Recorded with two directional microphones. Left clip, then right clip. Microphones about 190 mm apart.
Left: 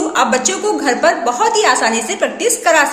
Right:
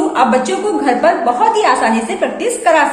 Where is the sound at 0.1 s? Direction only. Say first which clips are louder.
Right 2 dB; 25° left (ahead or behind).